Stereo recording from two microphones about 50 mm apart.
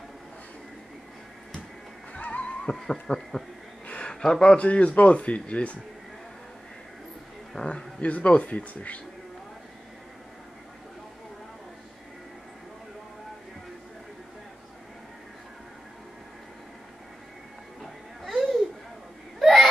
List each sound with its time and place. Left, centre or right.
2.1 s music: left
2.6 s speech: centre
3.8 s a sound: left
4.1 s speech: centre
7.5 s speech: left
18.2 s a sound: centre
19.4 s baby cry: centre